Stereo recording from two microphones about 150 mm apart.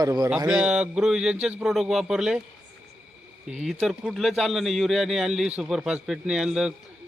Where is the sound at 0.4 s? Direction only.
5° right (ahead or behind).